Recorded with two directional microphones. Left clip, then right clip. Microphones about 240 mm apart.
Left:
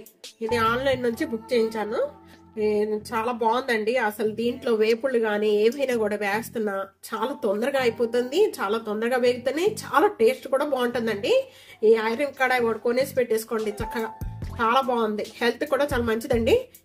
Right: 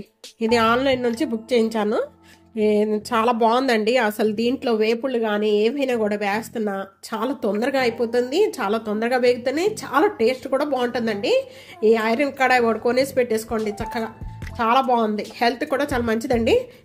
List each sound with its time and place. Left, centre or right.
0.4 s a woman's voice: right